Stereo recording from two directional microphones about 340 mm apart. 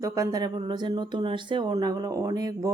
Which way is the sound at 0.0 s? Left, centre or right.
Centre.